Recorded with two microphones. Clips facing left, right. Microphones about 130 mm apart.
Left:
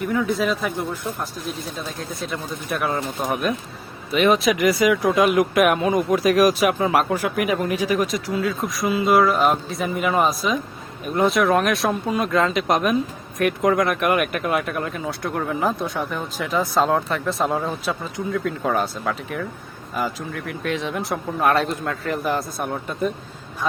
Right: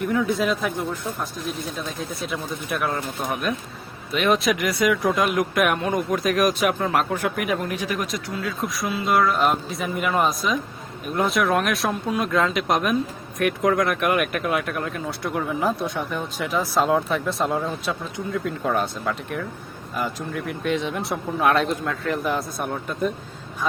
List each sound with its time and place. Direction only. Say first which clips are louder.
0.0 s speech: even; centre (ahead or behind)